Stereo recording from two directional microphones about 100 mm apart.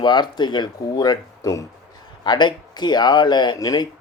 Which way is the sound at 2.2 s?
45° left (ahead or behind).